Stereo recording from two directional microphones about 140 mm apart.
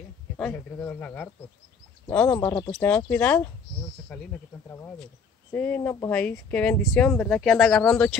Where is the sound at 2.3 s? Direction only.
30° left (ahead or behind).